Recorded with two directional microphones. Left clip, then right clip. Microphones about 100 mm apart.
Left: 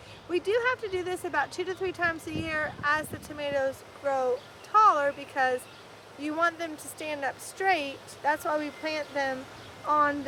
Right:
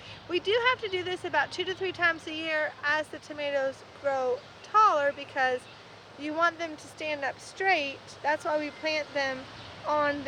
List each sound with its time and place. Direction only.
0.3 s speech: 45° left (ahead or behind)